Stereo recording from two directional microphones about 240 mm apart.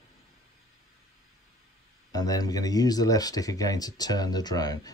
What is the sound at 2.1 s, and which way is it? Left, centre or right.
Speech, centre.